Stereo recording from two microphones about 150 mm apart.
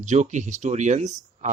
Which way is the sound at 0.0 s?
55° right (ahead or behind).